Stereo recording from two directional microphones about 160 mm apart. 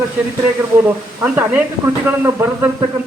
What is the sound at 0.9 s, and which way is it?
A man's voice, 10° right (ahead or behind).